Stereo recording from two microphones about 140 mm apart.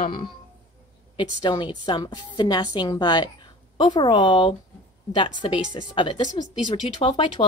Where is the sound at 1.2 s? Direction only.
35° left (ahead or behind).